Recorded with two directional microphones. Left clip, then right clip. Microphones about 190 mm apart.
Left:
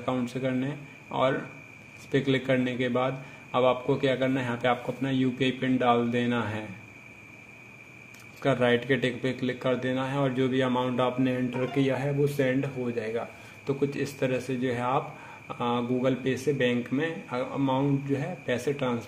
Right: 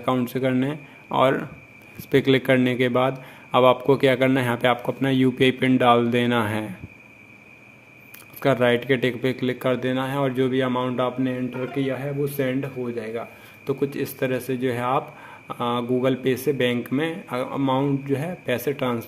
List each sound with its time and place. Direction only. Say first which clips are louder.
0.0 s a man's voice: right 7 dB; 25° right (ahead or behind)
8.4 s a man's voice: right 5 dB; 20° right (ahead or behind)